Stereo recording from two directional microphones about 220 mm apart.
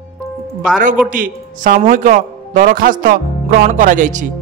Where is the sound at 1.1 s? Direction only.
40° right (ahead or behind).